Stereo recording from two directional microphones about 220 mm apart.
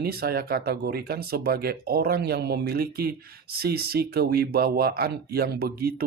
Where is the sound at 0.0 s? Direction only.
45° right (ahead or behind).